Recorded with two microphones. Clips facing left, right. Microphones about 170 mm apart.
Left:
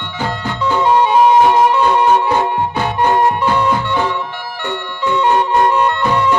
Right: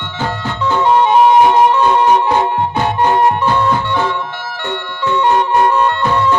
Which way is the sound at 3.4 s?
15° left (ahead or behind).